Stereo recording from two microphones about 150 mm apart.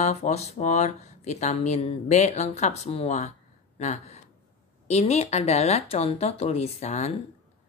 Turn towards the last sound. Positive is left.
turn(degrees=50)  # may be behind; listen again after turning